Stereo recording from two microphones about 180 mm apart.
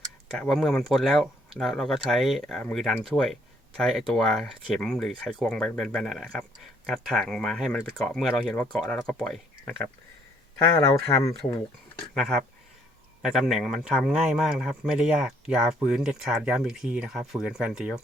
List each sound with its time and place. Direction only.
0.3 s speech: 5° left (ahead or behind)
10.8 s speech: 15° left (ahead or behind)
12.1 s speech: 5° left (ahead or behind)